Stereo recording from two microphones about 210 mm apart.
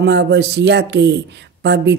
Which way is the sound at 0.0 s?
55° right (ahead or behind).